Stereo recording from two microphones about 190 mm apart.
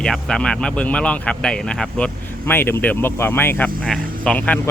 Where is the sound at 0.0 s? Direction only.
5° left (ahead or behind).